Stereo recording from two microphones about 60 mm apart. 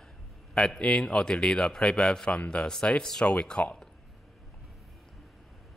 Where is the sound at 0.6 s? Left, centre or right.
Centre.